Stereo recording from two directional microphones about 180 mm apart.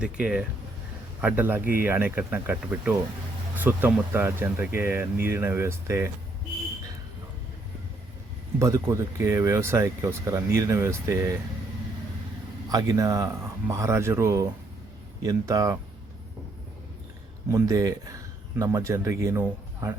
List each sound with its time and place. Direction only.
0.0 s speech: 5° right (ahead or behind)
8.5 s speech: 15° right (ahead or behind)
12.6 s speech: 20° right (ahead or behind)
17.5 s speech: 20° right (ahead or behind)